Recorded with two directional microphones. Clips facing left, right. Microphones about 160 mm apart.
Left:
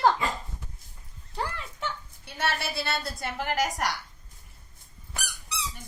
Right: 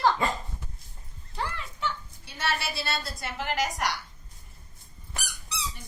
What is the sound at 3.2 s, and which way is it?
Speech, 50° left (ahead or behind).